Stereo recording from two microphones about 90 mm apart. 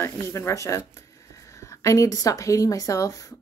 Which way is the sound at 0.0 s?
30° left (ahead or behind).